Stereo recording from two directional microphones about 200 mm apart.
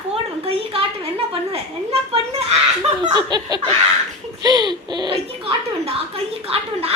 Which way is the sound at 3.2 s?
20° right (ahead or behind).